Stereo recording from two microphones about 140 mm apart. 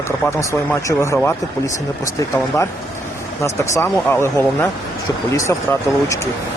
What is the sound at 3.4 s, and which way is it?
Speech, 20° left (ahead or behind).